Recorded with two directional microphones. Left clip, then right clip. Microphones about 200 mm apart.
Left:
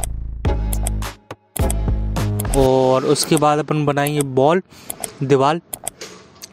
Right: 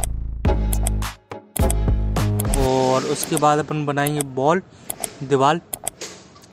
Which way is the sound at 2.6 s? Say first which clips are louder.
Left 4 dB; 30° left (ahead or behind).